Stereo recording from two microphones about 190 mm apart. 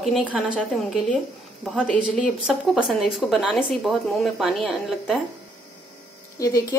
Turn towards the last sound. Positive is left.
turn(degrees=15)  # may be behind; listen again after turning